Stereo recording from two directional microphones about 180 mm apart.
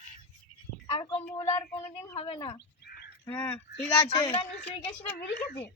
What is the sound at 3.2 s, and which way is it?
Speech, 10° left (ahead or behind).